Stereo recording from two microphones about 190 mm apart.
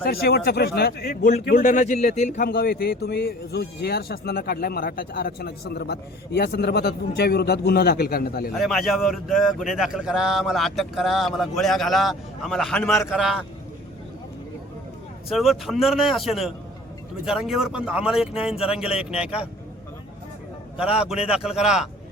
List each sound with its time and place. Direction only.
0.0 s a man's voice: 55° left (ahead or behind)
8.5 s a man's voice: centre (ahead or behind)
15.3 s a man's voice: centre (ahead or behind)
21.2 s a man's voice: 5° right (ahead or behind)